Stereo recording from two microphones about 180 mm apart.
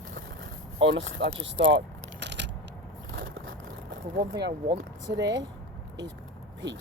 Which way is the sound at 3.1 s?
65° right (ahead or behind).